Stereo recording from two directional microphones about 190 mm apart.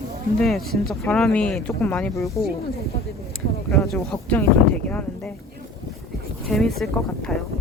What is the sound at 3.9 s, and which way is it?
Speech, 5° left (ahead or behind).